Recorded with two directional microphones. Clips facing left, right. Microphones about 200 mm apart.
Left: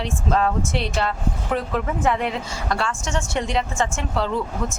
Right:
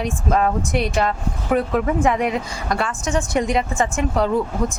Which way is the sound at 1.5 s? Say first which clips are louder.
Right 6 dB; 5° right (ahead or behind).